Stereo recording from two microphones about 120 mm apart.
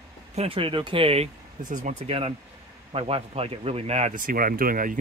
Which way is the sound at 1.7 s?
80° right.